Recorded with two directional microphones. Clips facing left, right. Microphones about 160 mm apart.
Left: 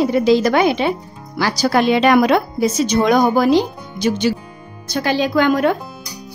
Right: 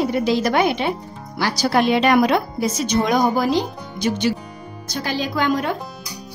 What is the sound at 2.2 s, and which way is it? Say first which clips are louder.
Speech: left 3 dB; 85° left.